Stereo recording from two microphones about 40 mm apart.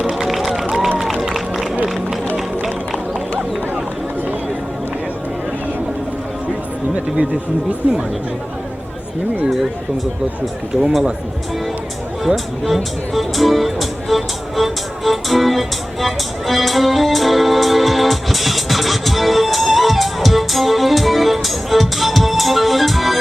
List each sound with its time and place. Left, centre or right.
0.0 s run: centre
7.8 s speech: right
12.6 s music: centre